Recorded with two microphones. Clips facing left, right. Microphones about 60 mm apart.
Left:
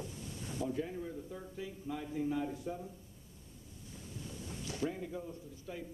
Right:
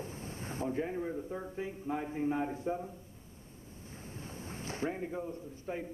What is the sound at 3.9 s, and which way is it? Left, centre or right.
Speech, right.